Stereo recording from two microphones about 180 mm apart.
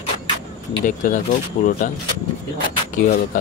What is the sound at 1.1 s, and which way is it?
Speech, 45° left (ahead or behind).